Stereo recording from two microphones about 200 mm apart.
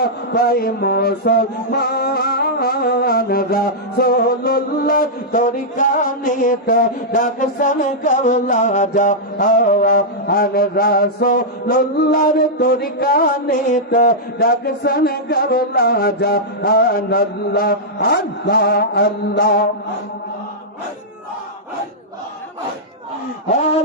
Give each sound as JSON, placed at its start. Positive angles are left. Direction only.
{"t": 0.0, "sound": "music", "side_deg": 50}